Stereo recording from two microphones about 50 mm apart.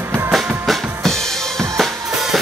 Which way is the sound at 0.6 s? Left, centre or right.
Centre.